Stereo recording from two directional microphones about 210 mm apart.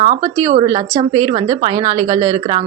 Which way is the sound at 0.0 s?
20° right (ahead or behind).